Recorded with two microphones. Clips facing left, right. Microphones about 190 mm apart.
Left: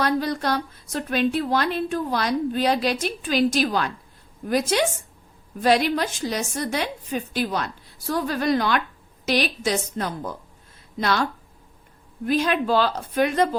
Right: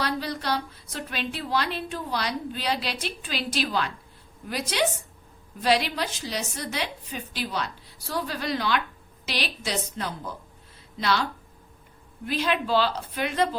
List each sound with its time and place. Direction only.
0.0 s a woman's voice: 50° left (ahead or behind)